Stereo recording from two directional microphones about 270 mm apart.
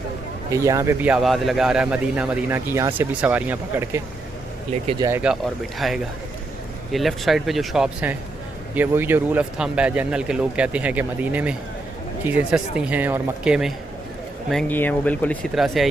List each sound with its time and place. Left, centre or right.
0.5 s a man's voice: centre